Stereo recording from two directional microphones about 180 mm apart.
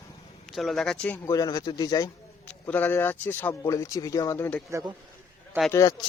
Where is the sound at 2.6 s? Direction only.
10° left (ahead or behind).